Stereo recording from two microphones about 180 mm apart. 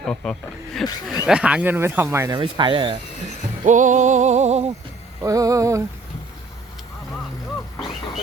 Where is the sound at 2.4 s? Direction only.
25° right (ahead or behind).